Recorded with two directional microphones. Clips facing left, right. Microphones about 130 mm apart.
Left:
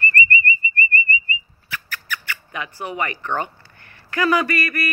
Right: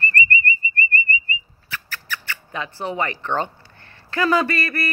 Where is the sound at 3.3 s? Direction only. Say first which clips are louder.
Right 1 dB; 25° right (ahead or behind).